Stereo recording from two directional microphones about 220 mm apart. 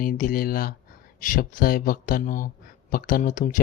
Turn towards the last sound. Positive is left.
turn(degrees=35)  # may be behind; listen again after turning